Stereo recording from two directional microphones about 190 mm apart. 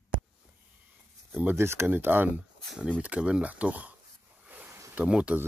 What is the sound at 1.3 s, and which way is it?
Speech, 10° right (ahead or behind).